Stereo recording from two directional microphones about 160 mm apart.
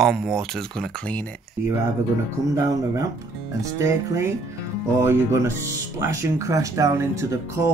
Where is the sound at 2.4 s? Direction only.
20° right (ahead or behind).